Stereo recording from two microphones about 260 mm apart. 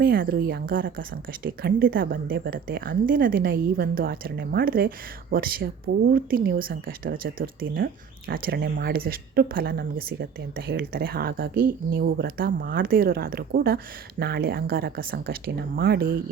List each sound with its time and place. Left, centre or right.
0.0 s a woman's voice: right